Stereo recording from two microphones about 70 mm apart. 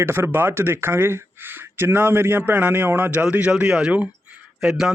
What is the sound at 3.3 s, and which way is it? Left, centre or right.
Speech, centre.